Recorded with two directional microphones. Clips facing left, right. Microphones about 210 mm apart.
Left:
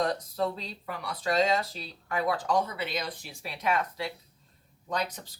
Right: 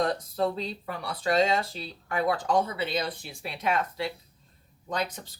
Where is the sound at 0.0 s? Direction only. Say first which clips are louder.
Right 2 dB; 25° right (ahead or behind).